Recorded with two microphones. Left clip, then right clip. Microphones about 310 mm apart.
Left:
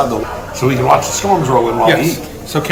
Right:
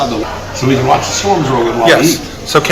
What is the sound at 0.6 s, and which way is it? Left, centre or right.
Speech, centre.